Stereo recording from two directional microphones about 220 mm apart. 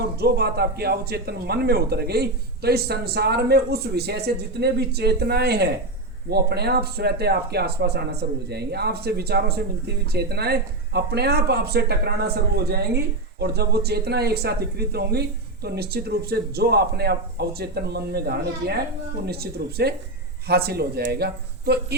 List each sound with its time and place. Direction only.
0.2 s speech: 45° right (ahead or behind)